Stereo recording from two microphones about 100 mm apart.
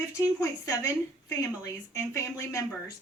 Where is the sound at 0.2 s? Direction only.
35° left (ahead or behind).